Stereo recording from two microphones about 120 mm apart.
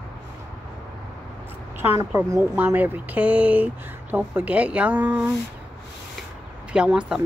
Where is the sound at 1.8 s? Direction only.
20° right (ahead or behind).